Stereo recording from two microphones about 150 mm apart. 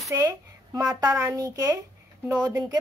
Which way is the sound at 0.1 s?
20° right (ahead or behind).